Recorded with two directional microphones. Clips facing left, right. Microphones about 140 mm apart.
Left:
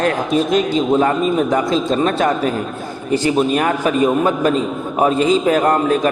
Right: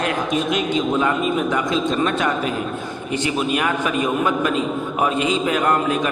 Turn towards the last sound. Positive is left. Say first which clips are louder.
# left 5 dB
turn(degrees=35)  # may be behind; listen again after turning